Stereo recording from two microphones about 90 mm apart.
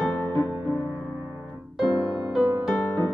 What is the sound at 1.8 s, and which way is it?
Music, 5° right (ahead or behind).